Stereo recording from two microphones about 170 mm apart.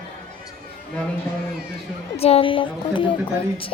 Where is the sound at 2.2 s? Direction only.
35° left (ahead or behind).